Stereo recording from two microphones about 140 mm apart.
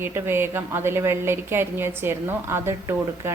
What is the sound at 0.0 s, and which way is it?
A woman's voice, 15° right (ahead or behind).